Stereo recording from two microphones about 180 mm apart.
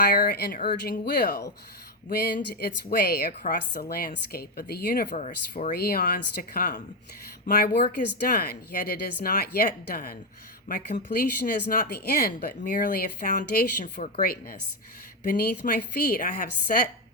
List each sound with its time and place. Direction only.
0.0 s speech: 60° left (ahead or behind)
2.6 s speech: 60° left (ahead or behind)
5.1 s speech: 40° left (ahead or behind)
5.7 s speech: 55° left (ahead or behind)